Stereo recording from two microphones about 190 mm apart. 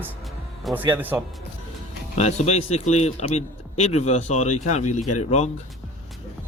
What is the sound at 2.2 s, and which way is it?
A man's voice, 35° left (ahead or behind).